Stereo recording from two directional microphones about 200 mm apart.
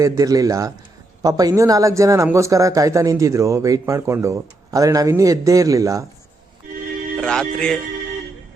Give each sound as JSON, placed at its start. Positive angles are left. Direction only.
{"t": 0.0, "sound": "a man's voice", "side_deg": -15}
{"t": 7.2, "sound": "speech", "side_deg": 5}